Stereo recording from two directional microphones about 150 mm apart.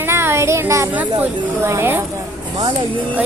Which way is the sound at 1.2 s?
15° right (ahead or behind).